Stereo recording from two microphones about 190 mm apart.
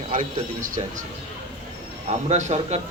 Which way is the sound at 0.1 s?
45° right (ahead or behind).